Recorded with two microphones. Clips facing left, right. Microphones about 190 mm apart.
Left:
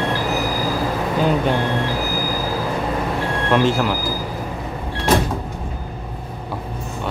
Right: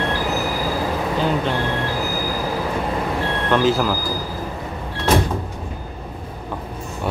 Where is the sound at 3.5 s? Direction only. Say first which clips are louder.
Even; centre (ahead or behind).